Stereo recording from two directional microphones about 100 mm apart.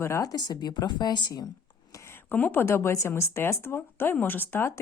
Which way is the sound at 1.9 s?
25° left (ahead or behind).